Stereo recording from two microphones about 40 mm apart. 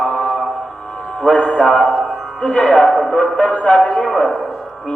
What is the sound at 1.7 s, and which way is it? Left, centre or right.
Music, centre.